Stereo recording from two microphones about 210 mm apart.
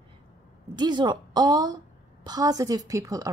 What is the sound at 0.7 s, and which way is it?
A woman's voice, 20° right (ahead or behind).